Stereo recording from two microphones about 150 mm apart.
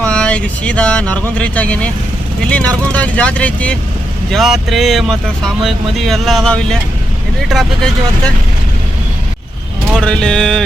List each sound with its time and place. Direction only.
0.0 s speech: 5° left (ahead or behind)
9.9 s speech: 5° left (ahead or behind)